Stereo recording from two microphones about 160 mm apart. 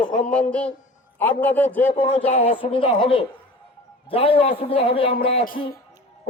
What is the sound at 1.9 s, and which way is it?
A man's voice, 35° left (ahead or behind).